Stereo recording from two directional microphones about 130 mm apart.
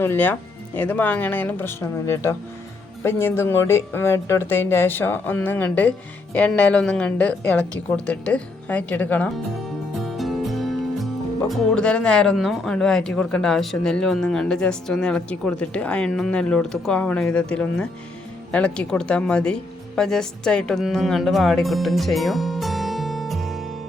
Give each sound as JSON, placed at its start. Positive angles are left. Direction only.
{"t": 0.0, "sound": "a woman's voice", "side_deg": 15}
{"t": 10.0, "sound": "a woman's voice", "side_deg": 0}